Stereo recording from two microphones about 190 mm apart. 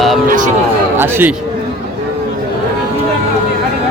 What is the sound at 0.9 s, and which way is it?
Speech, 10° right (ahead or behind).